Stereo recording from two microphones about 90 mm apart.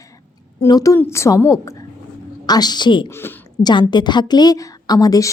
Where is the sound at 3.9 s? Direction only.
55° left (ahead or behind).